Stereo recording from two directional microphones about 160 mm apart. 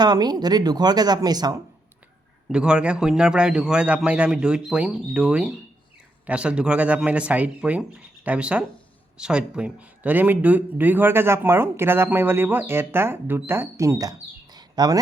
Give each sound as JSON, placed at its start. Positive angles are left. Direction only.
{"t": 0.0, "sound": "speech", "side_deg": -25}
{"t": 2.5, "sound": "a man's voice", "side_deg": -5}